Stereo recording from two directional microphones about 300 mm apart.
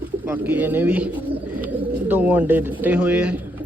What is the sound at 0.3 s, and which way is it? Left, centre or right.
Speech, centre.